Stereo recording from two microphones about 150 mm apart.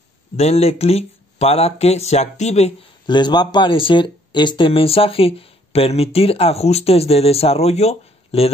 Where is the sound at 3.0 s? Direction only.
30° left (ahead or behind).